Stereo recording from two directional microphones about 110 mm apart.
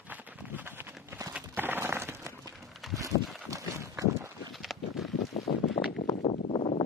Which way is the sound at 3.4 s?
30° right (ahead or behind).